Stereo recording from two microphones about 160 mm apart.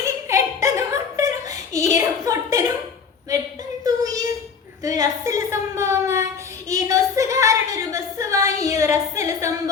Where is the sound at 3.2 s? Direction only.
20° right (ahead or behind).